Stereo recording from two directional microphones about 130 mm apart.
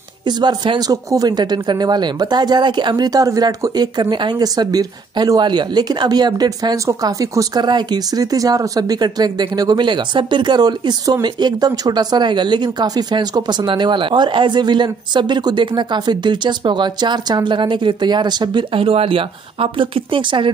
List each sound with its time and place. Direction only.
0.3 s speech: 35° right (ahead or behind)